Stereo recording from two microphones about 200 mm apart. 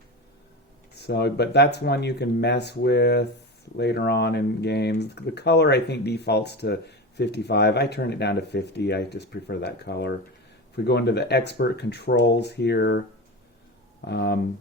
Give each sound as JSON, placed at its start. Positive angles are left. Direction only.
{"t": 0.9, "sound": "speech", "side_deg": 55}
{"t": 14.1, "sound": "speech", "side_deg": 55}